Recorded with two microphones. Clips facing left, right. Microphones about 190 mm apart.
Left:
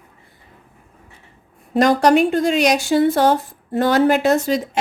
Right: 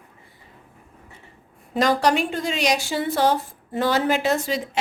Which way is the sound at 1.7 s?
50° left (ahead or behind).